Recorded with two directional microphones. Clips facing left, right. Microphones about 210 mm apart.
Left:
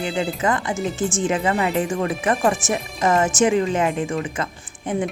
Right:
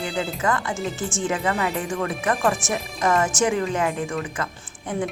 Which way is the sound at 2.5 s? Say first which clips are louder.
Left 3 dB; 5° left (ahead or behind).